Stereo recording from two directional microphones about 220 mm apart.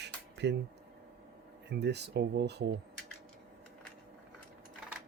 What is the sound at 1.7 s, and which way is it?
Speech, 50° right (ahead or behind).